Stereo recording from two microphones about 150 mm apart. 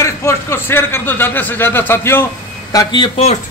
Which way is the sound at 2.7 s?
30° left (ahead or behind).